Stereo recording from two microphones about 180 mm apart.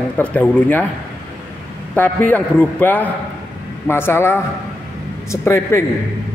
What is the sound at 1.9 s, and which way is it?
A man's voice, 10° left (ahead or behind).